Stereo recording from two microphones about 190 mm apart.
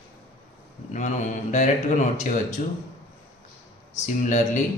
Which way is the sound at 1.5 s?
40° left (ahead or behind).